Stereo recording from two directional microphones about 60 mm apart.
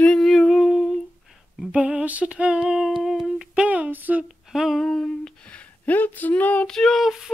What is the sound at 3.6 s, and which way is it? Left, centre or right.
Speech, right.